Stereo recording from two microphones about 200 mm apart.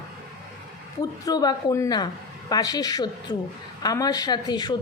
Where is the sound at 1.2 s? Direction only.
20° left (ahead or behind).